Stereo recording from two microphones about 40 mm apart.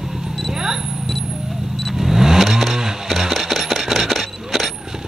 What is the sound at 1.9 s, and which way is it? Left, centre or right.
Vehicle, centre.